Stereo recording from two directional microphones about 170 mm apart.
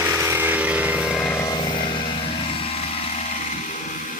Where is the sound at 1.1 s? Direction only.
5° left (ahead or behind).